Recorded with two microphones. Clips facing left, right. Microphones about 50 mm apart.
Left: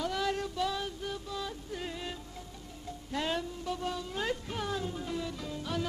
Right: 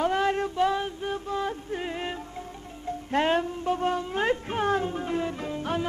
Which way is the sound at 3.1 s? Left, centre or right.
Right.